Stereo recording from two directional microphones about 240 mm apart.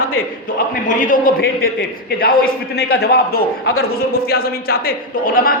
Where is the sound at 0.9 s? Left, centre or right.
Left.